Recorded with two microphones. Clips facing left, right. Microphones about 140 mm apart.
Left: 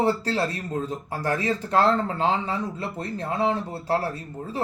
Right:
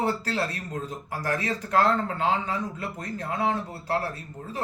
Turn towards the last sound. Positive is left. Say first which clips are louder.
# left 4 dB
turn(degrees=30)  # may be behind; listen again after turning